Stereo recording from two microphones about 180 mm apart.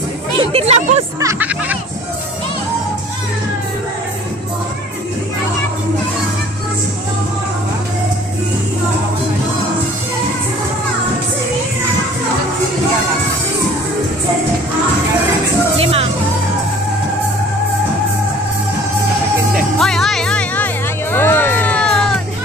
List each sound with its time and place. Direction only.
0.4 s speech: 30° right (ahead or behind)
1.2 s speech: 10° right (ahead or behind)
15.8 s music: 35° right (ahead or behind)
19.8 s music: centre (ahead or behind)